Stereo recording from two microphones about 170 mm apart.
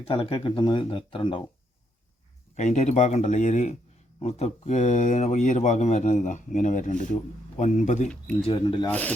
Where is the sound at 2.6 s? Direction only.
45° left (ahead or behind).